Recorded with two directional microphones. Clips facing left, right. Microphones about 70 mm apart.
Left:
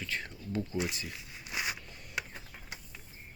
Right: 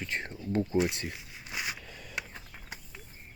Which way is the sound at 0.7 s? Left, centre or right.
Right.